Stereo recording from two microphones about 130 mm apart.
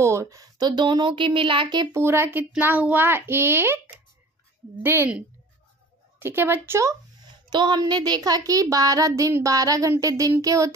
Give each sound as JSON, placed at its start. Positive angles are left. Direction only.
{"t": 0.0, "sound": "a woman's voice", "side_deg": -20}
{"t": 1.9, "sound": "a child's voice", "side_deg": -20}